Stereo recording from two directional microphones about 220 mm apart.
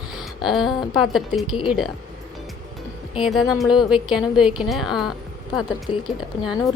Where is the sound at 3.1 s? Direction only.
Centre (ahead or behind).